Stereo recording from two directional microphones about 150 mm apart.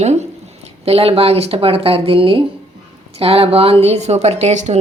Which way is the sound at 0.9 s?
40° right (ahead or behind).